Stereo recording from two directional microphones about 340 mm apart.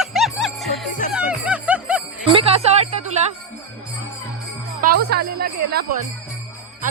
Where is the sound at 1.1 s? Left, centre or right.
Centre.